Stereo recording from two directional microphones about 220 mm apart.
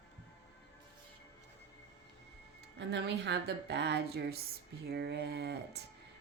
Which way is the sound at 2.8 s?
50° right (ahead or behind).